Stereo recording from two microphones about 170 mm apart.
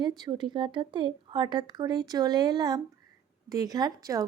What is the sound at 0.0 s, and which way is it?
Speech, 25° right (ahead or behind).